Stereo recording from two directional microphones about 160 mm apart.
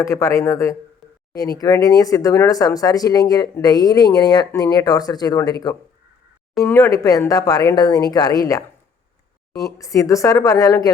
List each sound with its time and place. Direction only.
0.0 s speech: 20° left (ahead or behind)